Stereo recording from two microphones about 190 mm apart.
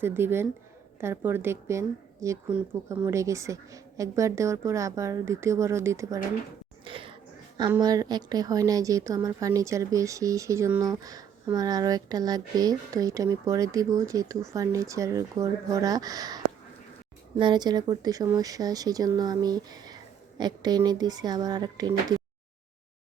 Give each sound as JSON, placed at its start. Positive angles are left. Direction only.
{"t": 0.0, "sound": "a woman's voice", "side_deg": -10}
{"t": 6.8, "sound": "a sound", "side_deg": -25}
{"t": 7.8, "sound": "a woman's voice", "side_deg": -20}